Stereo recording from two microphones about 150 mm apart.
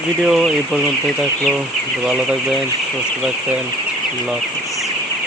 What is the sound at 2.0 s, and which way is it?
Speech, 5° right (ahead or behind).